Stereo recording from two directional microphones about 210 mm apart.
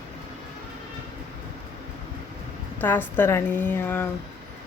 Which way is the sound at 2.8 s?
10° left (ahead or behind).